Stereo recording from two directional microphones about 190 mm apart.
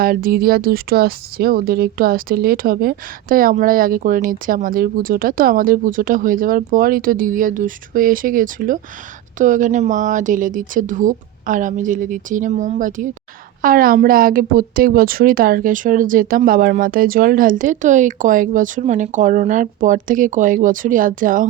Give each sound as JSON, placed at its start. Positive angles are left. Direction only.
{"t": 0.0, "sound": "speech", "side_deg": -50}